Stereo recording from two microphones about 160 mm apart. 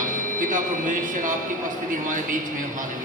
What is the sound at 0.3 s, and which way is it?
Speech, 55° right (ahead or behind).